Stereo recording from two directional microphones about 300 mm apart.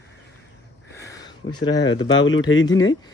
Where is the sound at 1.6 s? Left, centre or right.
Centre.